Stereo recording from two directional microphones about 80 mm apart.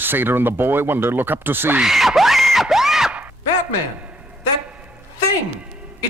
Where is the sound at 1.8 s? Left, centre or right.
Centre.